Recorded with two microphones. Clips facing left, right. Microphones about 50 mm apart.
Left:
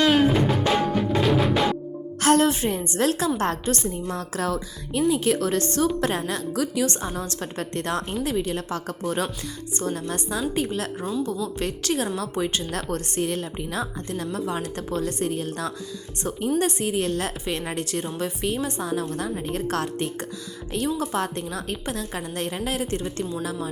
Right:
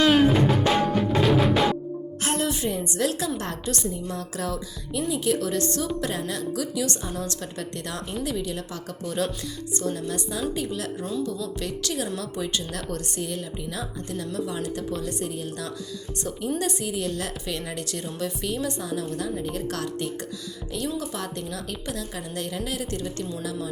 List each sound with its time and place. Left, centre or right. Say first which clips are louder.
0.0 s music: even; centre
2.4 s a woman's voice: left 4 dB; left